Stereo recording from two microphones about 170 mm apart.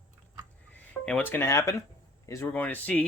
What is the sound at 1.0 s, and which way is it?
Speech, 10° left (ahead or behind).